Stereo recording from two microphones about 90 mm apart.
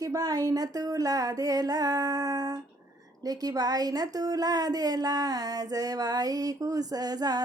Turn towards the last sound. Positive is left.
turn(degrees=-45)  # may be behind; listen again after turning